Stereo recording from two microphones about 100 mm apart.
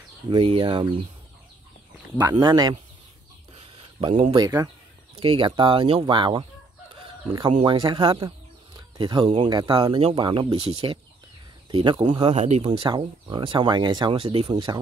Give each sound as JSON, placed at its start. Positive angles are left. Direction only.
{"t": 0.3, "sound": "speech", "side_deg": -60}
{"t": 2.3, "sound": "speech", "side_deg": -45}
{"t": 4.3, "sound": "speech", "side_deg": -45}
{"t": 5.2, "sound": "speech", "side_deg": -60}
{"t": 11.7, "sound": "speech", "side_deg": -50}
{"t": 12.3, "sound": "speech", "side_deg": -90}